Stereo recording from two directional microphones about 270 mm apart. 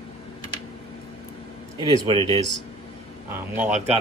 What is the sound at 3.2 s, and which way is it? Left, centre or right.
Speech, centre.